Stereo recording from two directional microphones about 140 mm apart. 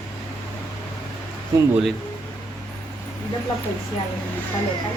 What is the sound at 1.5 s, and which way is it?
Speech, 25° right (ahead or behind).